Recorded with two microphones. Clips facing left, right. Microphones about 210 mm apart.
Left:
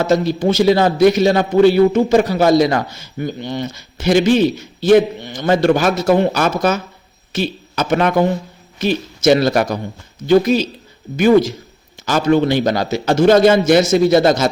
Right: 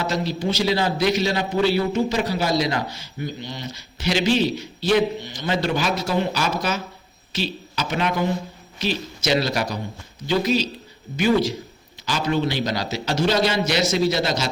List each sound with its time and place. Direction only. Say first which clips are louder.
0.0 s speech: left 9 dB; 50° left (ahead or behind)